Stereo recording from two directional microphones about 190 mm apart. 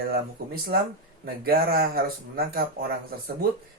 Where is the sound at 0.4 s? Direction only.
55° right (ahead or behind).